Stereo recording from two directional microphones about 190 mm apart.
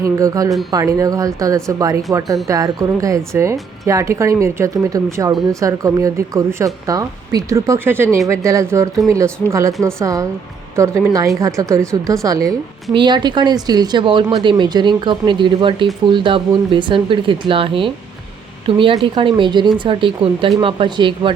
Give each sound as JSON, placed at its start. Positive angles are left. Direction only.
{"t": 0.0, "sound": "a woman's voice", "side_deg": -20}